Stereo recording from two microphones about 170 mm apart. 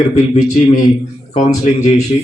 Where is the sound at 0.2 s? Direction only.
45° left (ahead or behind).